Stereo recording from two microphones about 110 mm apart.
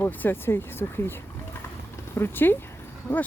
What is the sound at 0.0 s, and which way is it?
Speech, 15° left (ahead or behind).